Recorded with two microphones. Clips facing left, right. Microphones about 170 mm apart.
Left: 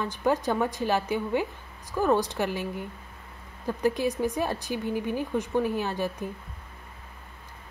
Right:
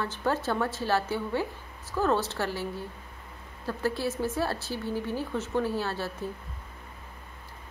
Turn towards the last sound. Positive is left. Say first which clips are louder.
# left 3 dB
turn(degrees=15)  # may be behind; listen again after turning